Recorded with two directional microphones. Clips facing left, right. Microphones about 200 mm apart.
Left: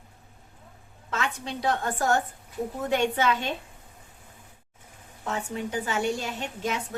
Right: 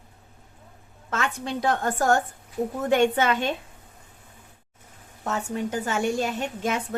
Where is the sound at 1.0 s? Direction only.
50° right (ahead or behind).